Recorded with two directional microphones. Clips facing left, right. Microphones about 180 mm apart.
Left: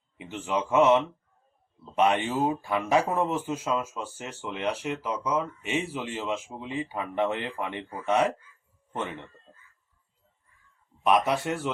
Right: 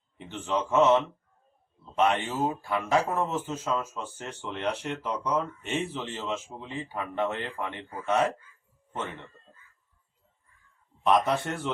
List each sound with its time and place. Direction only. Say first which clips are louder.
0.2 s speech: even; 10° left (ahead or behind)
11.0 s speech: even; 10° left (ahead or behind)